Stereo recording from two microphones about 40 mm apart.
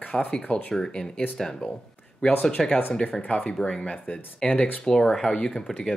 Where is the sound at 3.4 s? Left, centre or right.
Centre.